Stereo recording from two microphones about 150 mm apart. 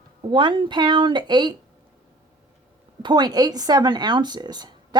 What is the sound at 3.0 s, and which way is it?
Speech, 30° right (ahead or behind).